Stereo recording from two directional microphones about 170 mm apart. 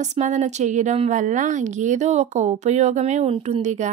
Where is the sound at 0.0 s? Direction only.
45° right (ahead or behind).